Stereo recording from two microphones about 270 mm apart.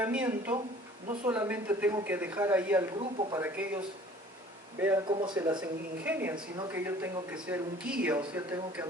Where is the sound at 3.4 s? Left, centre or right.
Centre.